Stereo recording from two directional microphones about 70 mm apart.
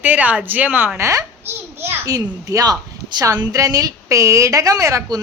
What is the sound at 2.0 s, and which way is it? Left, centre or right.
Speech, right.